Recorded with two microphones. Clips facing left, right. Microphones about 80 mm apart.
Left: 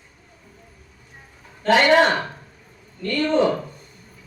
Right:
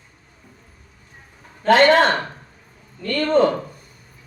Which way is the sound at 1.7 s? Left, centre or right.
Centre.